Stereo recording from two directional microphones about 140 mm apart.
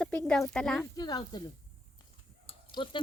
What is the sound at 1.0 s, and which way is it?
Speech, 30° left (ahead or behind).